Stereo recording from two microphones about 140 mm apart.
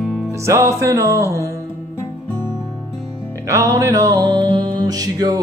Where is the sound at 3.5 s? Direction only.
25° right (ahead or behind).